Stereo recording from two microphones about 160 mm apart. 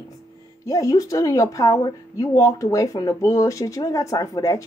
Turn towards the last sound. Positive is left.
turn(degrees=20)  # may be behind; listen again after turning